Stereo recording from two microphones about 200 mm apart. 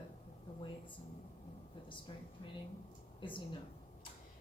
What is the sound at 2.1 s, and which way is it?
A woman's voice, 25° left (ahead or behind).